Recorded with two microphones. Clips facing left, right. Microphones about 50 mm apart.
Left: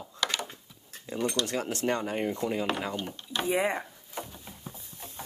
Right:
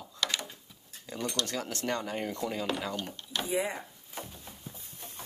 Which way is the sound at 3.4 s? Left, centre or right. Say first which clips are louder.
Left 5 dB; left.